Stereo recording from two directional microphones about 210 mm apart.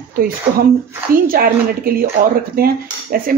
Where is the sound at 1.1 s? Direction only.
45° right (ahead or behind).